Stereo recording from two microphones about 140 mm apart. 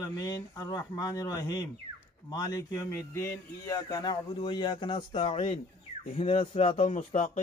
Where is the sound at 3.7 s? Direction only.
30° left (ahead or behind); by 7.0 s 45° left (ahead or behind).